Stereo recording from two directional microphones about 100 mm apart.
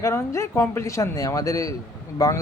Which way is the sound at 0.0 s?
30° left (ahead or behind).